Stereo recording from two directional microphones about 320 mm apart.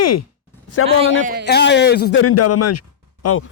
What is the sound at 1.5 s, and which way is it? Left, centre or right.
A man's voice, left.